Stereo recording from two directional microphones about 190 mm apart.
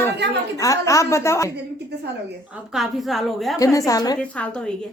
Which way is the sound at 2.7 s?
Centre (ahead or behind).